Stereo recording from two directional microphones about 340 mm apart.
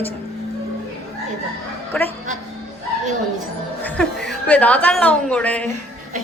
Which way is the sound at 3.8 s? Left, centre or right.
Centre.